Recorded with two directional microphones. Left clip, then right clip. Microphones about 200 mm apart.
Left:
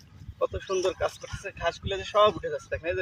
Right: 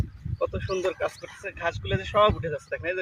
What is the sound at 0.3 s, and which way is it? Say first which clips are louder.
Speech: even; centre (ahead or behind).